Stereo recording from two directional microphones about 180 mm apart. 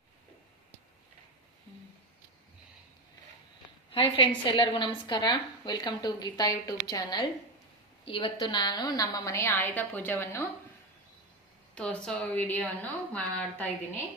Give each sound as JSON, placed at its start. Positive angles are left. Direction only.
{"t": 3.9, "sound": "a woman's voice", "side_deg": 30}
{"t": 11.7, "sound": "a woman's voice", "side_deg": 5}